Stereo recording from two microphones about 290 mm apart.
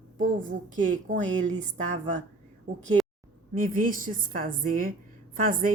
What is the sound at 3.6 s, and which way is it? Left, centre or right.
Speech, right.